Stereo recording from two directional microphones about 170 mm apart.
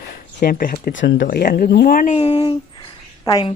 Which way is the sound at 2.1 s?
30° left (ahead or behind).